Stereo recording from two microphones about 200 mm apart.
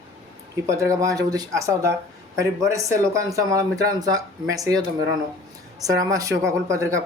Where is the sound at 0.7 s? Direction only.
15° right (ahead or behind).